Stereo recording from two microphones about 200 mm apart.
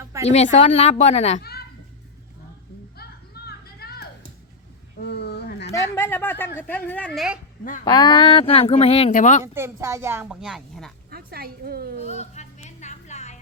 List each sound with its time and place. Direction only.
0.0 s a sound: 15° right (ahead or behind)
0.3 s a woman's voice: 35° left (ahead or behind)
1.4 s a child's voice: 50° left (ahead or behind)
3.0 s a sound: 50° left (ahead or behind)
5.9 s speech: 10° left (ahead or behind)
7.9 s speech: 20° left (ahead or behind); by 9.4 s 40° left (ahead or behind)
9.4 s a woman's voice: 15° right (ahead or behind)
11.1 s a woman's voice: 50° right (ahead or behind)
11.9 s a sound: 35° left (ahead or behind)